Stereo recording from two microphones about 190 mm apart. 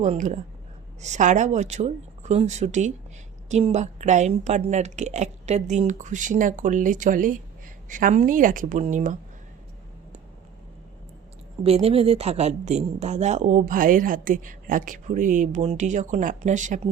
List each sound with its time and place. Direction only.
0.0 s speech: 40° right (ahead or behind)
11.6 s speech: 30° right (ahead or behind)